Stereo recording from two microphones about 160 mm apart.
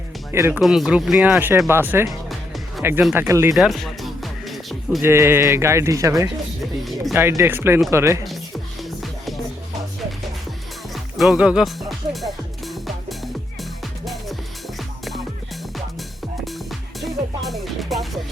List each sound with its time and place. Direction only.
0.3 s speech: 15° right (ahead or behind)
0.6 s speech: centre (ahead or behind)
2.0 s music: centre (ahead or behind)
3.2 s speech: 15° right (ahead or behind)
3.5 s music: centre (ahead or behind)
5.0 s speech: 15° right (ahead or behind)
10.9 s music: centre (ahead or behind)
17.0 s music: centre (ahead or behind)